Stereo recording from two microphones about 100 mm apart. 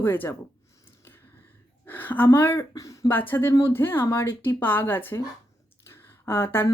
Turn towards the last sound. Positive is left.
turn(degrees=20)  # may be behind; listen again after turning